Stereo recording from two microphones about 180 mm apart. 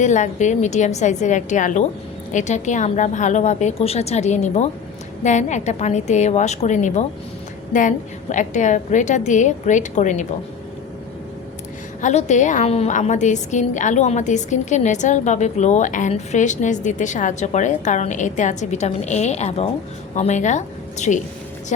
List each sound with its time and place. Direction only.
0.0 s a woman's voice: 40° left (ahead or behind)
12.0 s a woman's voice: 40° left (ahead or behind)